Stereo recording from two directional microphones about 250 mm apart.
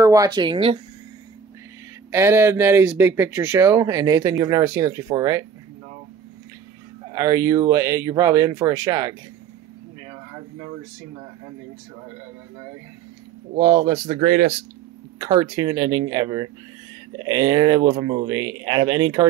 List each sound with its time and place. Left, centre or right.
0.0 s speech: centre
2.0 s speech: centre
7.1 s speech: centre
13.6 s speech: right
15.1 s speech: centre